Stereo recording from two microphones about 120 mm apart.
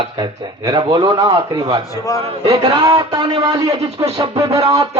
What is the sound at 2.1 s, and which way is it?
Speech, 30° left (ahead or behind).